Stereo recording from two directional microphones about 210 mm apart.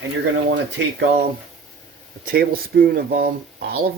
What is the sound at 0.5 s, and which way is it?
Speech, 55° right (ahead or behind).